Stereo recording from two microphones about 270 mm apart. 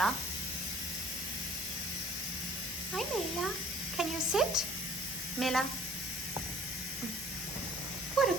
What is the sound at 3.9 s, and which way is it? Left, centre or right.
Speech, centre.